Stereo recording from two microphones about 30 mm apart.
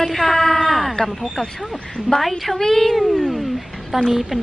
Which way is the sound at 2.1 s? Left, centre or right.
Centre.